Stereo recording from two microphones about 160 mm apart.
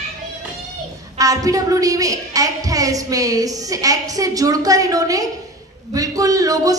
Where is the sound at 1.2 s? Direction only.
20° right (ahead or behind).